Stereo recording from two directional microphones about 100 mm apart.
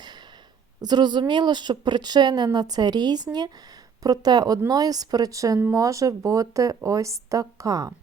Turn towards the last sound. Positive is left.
turn(degrees=-35)  # may be behind; listen again after turning